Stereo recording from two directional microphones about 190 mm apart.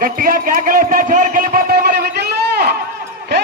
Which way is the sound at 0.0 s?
45° right (ahead or behind).